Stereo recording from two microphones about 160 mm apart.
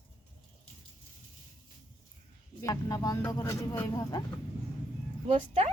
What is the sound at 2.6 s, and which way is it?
Speech, 20° left (ahead or behind).